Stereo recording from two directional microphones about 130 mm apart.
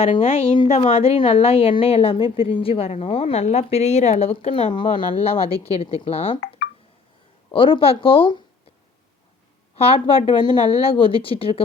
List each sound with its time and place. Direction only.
0.0 s a woman's voice: 50° left (ahead or behind)
4.4 s a woman's voice: 45° left (ahead or behind)
5.5 s a woman's voice: 30° right (ahead or behind)
5.8 s a woman's voice: 50° left (ahead or behind)
7.5 s a woman's voice: 40° left (ahead or behind)
9.7 s a woman's voice: 50° left (ahead or behind)
10.7 s a woman's voice: 50° left (ahead or behind)